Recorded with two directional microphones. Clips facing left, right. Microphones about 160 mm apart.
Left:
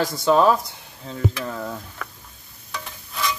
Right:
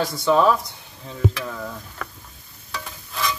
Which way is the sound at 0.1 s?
20° left (ahead or behind).